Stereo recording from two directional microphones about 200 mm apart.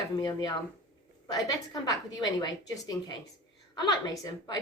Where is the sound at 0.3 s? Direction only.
20° left (ahead or behind).